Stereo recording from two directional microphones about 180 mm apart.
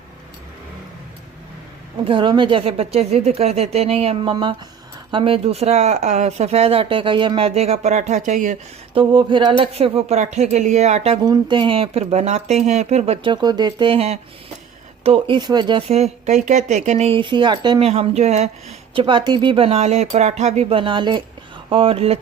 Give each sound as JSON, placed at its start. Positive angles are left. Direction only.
{"t": 2.0, "sound": "speech", "side_deg": -25}
{"t": 9.0, "sound": "speech", "side_deg": -25}
{"t": 11.3, "sound": "speech", "side_deg": -25}
{"t": 18.9, "sound": "speech", "side_deg": -25}